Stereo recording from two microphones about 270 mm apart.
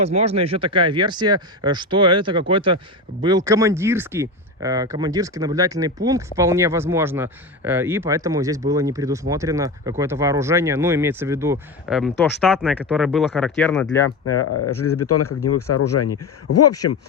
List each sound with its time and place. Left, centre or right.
0.0 s speech: right; by 13.8 s centre
14.3 s speech: left